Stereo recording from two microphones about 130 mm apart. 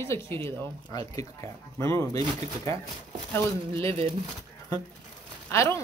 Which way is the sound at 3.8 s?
45° right (ahead or behind).